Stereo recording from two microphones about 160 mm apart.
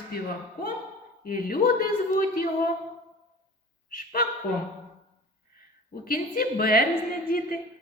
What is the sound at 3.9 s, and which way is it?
Speech, 60° left (ahead or behind).